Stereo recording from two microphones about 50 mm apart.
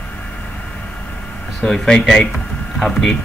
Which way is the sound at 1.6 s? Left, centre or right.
Centre.